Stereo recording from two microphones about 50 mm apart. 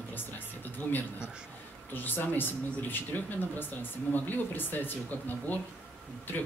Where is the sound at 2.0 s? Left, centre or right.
Left.